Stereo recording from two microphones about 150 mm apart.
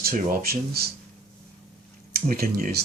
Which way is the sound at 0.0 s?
80° right.